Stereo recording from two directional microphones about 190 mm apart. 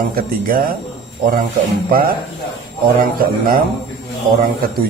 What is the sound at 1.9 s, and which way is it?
Mantra, 50° right (ahead or behind).